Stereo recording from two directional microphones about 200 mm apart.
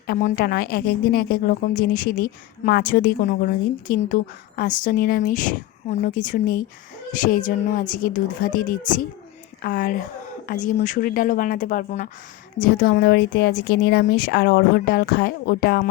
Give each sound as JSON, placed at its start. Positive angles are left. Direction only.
{"t": 0.1, "sound": "a woman's voice", "side_deg": 40}